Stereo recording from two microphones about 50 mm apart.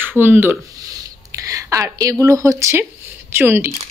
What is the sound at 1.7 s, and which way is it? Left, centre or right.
A woman's voice, right.